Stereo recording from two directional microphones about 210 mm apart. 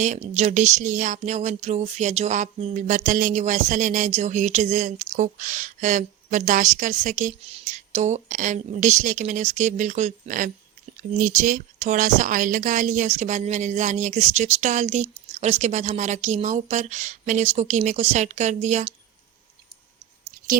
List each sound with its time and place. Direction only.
0.0 s a woman's voice: 35° right (ahead or behind)